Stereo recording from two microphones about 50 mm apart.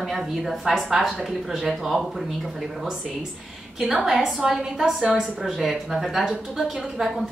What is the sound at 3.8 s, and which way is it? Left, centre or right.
A woman's voice, centre.